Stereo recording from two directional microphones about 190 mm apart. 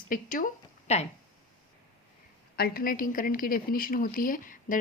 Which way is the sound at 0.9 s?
35° left (ahead or behind).